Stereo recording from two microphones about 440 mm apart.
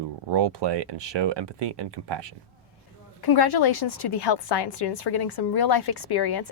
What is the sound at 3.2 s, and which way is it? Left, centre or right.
A woman's voice, left.